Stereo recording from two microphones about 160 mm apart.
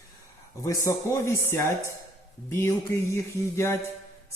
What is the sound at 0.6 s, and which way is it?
A man's voice, 20° left (ahead or behind).